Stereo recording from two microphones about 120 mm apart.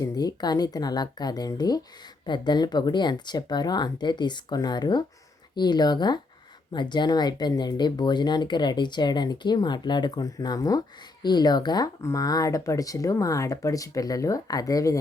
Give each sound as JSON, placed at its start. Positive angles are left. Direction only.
{"t": 0.0, "sound": "speech", "side_deg": 30}